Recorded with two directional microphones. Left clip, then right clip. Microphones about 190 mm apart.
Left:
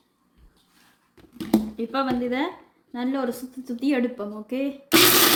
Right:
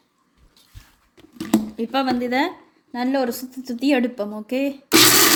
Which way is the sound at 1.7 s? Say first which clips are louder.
Right 4 dB; 55° right (ahead or behind).